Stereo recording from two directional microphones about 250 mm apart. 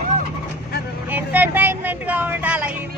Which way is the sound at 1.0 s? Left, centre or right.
Centre.